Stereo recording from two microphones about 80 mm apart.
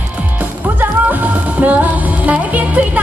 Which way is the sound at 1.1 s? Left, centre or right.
Right.